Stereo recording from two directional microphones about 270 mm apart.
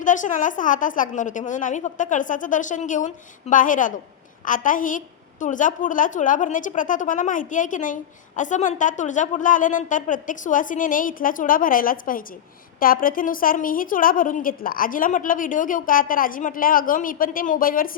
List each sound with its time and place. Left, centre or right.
0.0 s a woman's voice: left